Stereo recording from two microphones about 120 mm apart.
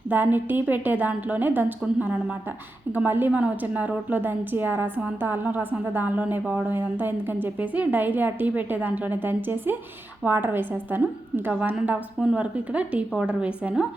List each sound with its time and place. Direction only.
0.1 s a woman's voice: 15° right (ahead or behind)